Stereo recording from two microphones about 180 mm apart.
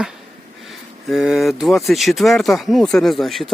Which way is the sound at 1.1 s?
Centre (ahead or behind).